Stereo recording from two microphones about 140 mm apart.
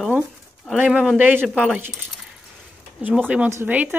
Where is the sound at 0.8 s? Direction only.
10° right (ahead or behind).